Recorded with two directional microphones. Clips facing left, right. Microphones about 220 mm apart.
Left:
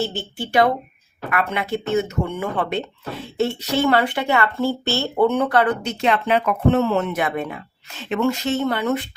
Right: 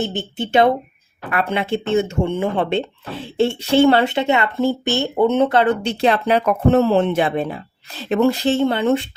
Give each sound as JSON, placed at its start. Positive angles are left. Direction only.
{"t": 0.0, "sound": "speech", "side_deg": -20}